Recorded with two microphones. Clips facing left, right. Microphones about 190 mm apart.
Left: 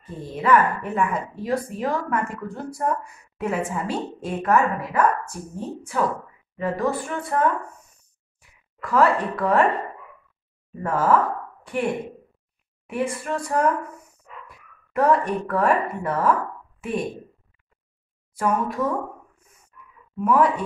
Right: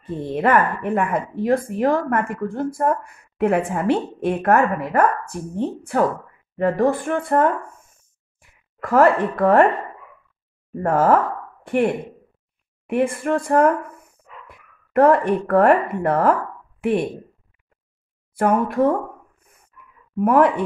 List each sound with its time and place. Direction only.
0.0 s speech: 60° right (ahead or behind)
18.3 s a sound: 60° right (ahead or behind)
20.2 s speech: 55° right (ahead or behind)